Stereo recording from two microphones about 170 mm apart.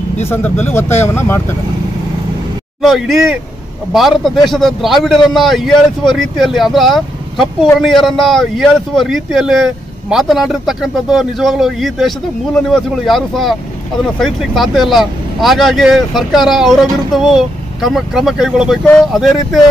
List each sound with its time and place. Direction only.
0.3 s speech: 10° left (ahead or behind)
2.8 s speech: centre (ahead or behind)